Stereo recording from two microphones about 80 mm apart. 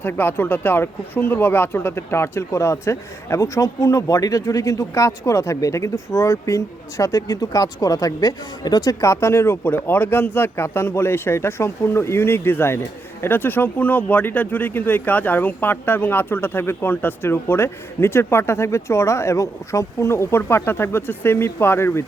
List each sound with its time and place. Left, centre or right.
0.0 s speech: left